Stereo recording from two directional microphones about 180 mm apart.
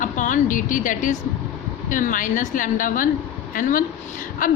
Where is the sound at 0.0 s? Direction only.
45° left (ahead or behind).